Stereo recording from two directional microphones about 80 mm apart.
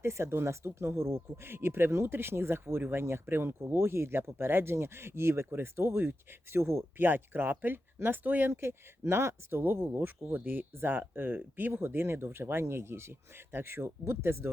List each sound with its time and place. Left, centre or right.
0.0 s speech: right